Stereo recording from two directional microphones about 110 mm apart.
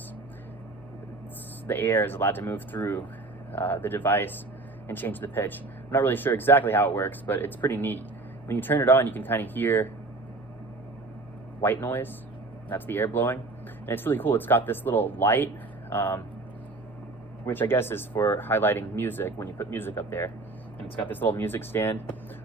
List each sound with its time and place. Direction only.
1.6 s speech: 20° left (ahead or behind)
11.6 s speech: 20° left (ahead or behind)
17.4 s speech: 20° left (ahead or behind)